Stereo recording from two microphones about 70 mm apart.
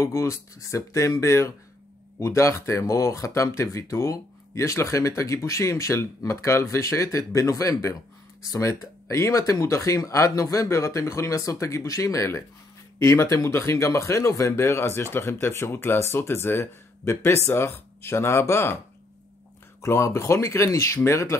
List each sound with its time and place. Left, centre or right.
0.0 s speech: left
19.8 s speech: left